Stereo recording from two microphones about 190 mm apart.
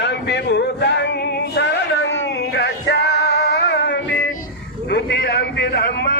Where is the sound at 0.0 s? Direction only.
65° left (ahead or behind).